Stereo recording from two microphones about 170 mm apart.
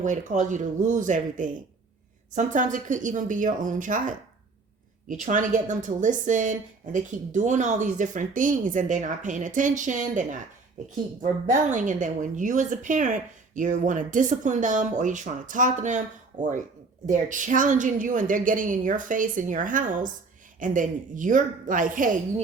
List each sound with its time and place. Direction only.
0.0 s a woman's voice: 50° right (ahead or behind)